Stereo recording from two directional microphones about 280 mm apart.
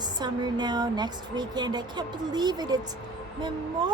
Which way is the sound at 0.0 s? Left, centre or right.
Centre.